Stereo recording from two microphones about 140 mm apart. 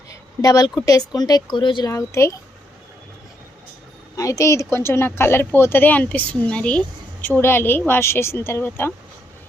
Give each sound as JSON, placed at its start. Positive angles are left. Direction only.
{"t": 0.1, "sound": "a sound", "side_deg": 25}
{"t": 0.8, "sound": "speech", "side_deg": 25}
{"t": 1.9, "sound": "speech", "side_deg": 20}
{"t": 4.2, "sound": "speech", "side_deg": 25}